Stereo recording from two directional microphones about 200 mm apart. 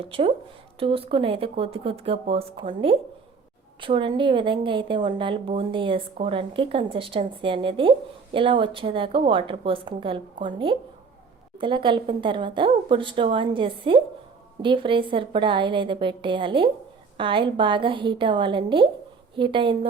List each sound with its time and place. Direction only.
0.0 s a woman's voice: 25° right (ahead or behind)